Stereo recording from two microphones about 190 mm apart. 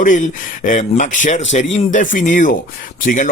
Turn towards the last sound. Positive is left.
turn(degrees=45)  # may be behind; listen again after turning